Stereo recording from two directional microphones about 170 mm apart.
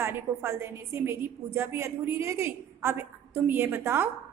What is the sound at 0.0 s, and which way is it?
A woman's voice, 15° right (ahead or behind).